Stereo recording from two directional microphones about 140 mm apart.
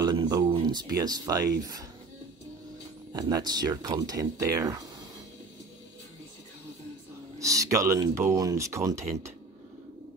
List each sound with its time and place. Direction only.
0.0 s speech: 30° right (ahead or behind)
3.1 s speech: 25° right (ahead or behind)
7.3 s speech: 25° right (ahead or behind)